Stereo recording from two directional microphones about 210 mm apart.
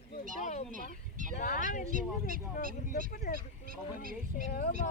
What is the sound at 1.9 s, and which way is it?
Speech, 40° right (ahead or behind).